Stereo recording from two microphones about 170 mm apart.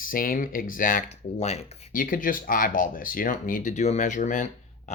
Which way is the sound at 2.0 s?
55° left (ahead or behind).